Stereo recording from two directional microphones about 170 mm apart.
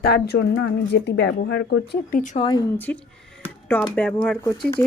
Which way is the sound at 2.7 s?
10° left (ahead or behind).